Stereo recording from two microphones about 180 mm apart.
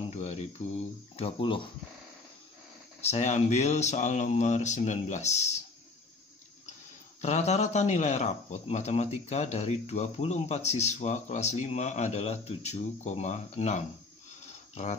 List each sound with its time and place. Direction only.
0.1 s speech: 35° left (ahead or behind)
3.0 s speech: 40° left (ahead or behind)
7.2 s speech: 40° left (ahead or behind)